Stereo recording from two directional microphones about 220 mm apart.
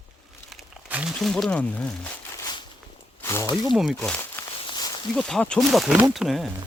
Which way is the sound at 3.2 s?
15° left (ahead or behind).